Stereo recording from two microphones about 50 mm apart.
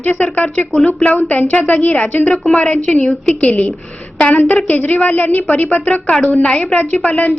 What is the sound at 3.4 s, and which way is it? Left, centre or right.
A woman's voice, left.